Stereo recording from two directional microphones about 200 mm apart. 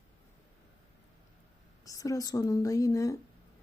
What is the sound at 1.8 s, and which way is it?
A woman's voice, 15° left (ahead or behind).